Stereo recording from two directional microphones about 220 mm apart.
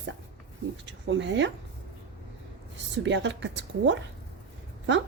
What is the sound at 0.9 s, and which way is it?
Speech, 55° right (ahead or behind).